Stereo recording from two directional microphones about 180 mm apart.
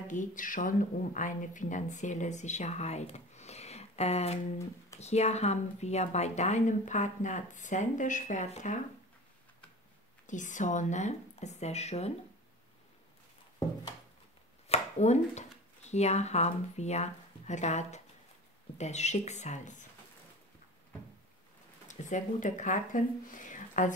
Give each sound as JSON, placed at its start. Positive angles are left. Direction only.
{"t": 0.1, "sound": "speech", "side_deg": 45}
{"t": 10.2, "sound": "speech", "side_deg": 45}
{"t": 14.7, "sound": "chopping", "side_deg": 40}
{"t": 15.9, "sound": "speech", "side_deg": 40}
{"t": 21.8, "sound": "speech", "side_deg": 45}